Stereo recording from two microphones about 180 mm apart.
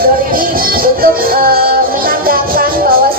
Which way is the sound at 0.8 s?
55° right (ahead or behind).